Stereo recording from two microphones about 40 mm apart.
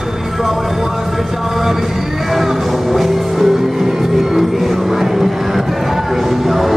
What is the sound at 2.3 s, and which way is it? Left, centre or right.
Music, centre.